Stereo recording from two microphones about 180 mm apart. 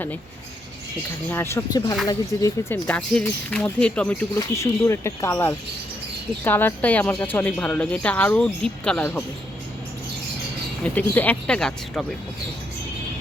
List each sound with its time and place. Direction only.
1.3 s speech: 15° left (ahead or behind)
4.4 s speech: 15° left (ahead or behind)
10.8 s speech: 10° left (ahead or behind)